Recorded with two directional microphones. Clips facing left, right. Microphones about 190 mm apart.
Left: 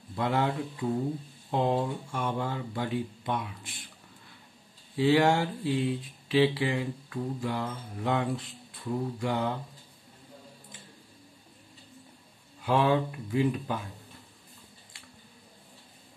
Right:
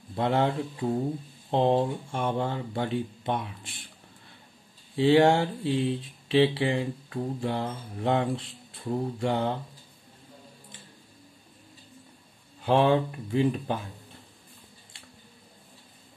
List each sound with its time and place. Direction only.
0.1 s speech: 30° right (ahead or behind)
4.9 s speech: 25° right (ahead or behind)
12.6 s speech: 30° right (ahead or behind)